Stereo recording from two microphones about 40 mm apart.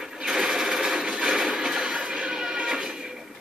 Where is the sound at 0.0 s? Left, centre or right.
Centre.